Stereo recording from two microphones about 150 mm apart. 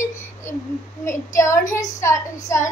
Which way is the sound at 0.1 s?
15° left (ahead or behind).